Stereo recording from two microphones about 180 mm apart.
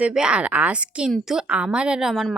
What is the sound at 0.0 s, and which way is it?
A woman's voice, 5° right (ahead or behind).